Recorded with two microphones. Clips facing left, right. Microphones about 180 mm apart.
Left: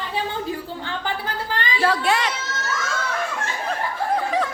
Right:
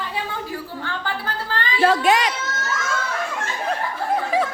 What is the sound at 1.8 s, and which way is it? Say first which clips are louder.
Speech: right 4 dB; 20° right (ahead or behind).